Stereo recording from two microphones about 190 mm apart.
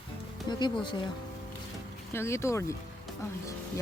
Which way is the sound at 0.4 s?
25° left (ahead or behind).